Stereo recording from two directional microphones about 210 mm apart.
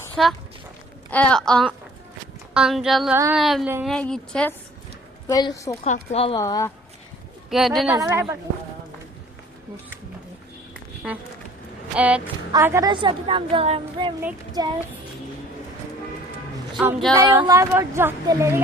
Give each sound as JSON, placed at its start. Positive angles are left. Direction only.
{"t": 0.2, "sound": "a woman's voice", "side_deg": 0}
{"t": 3.8, "sound": "a woman's voice", "side_deg": 5}
{"t": 5.3, "sound": "a woman's voice", "side_deg": 20}
{"t": 5.8, "sound": "speech", "side_deg": 30}
{"t": 6.4, "sound": "a woman's voice", "side_deg": 15}
{"t": 7.5, "sound": "a woman's voice", "side_deg": 0}
{"t": 7.9, "sound": "speech", "side_deg": -15}
{"t": 11.0, "sound": "a woman's voice", "side_deg": -5}
{"t": 14.2, "sound": "a woman's voice", "side_deg": -15}
{"t": 17.2, "sound": "speech", "side_deg": -20}